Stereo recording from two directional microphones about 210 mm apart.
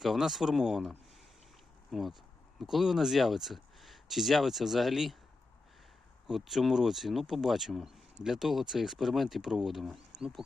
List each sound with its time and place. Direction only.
0.0 s speech: centre (ahead or behind)
6.2 s speech: centre (ahead or behind)